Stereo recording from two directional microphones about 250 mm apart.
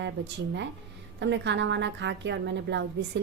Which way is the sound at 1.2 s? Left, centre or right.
Right.